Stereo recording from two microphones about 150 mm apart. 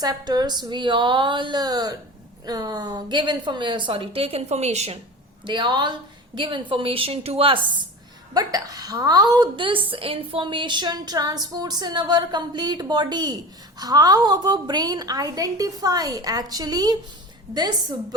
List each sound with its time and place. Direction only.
0.0 s a woman's voice: 25° right (ahead or behind); by 4.9 s 45° right (ahead or behind)
5.5 s a woman's voice: 30° right (ahead or behind)
8.3 s a woman's voice: 25° right (ahead or behind)